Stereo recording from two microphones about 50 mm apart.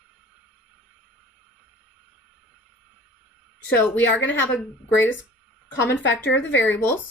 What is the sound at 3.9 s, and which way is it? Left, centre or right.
Speech, left.